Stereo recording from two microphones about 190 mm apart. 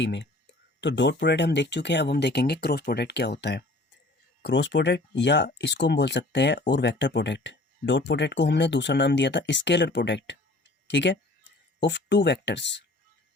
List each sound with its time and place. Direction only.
0.0 s speech: 70° left (ahead or behind)